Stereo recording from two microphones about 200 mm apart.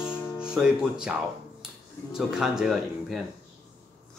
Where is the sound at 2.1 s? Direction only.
5° right (ahead or behind).